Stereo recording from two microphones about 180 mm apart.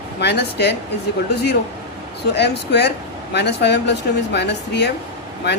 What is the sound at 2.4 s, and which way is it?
Speech, 70° left (ahead or behind).